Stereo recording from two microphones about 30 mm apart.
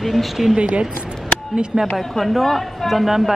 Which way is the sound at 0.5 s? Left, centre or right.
Right.